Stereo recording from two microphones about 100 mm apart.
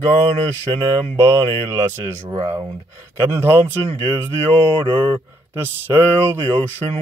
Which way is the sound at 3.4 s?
25° right (ahead or behind).